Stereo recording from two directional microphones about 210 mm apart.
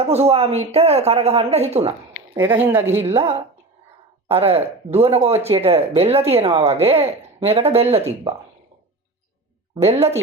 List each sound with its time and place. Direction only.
0.0 s speech: 30° right (ahead or behind)
2.3 s a woman's voice: 10° right (ahead or behind)
4.3 s speech: 30° right (ahead or behind)
9.8 s speech: 30° right (ahead or behind)